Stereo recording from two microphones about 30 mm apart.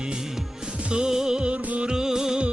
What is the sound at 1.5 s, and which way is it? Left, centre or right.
Music, right.